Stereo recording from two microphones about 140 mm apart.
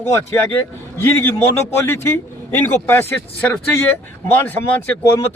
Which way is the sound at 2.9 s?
15° left (ahead or behind).